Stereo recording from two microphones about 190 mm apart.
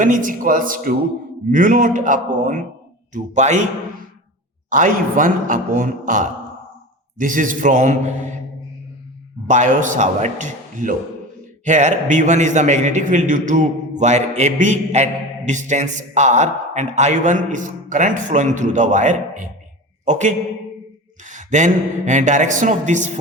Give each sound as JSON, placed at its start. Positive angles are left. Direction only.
{"t": 0.0, "sound": "a man's voice", "side_deg": -45}
{"t": 4.7, "sound": "a man's voice", "side_deg": -45}
{"t": 9.5, "sound": "a man's voice", "side_deg": -40}